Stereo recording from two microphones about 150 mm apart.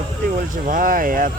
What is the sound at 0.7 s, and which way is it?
Speech, 65° right (ahead or behind).